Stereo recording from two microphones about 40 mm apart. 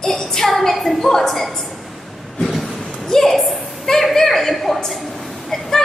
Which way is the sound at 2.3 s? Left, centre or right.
Centre.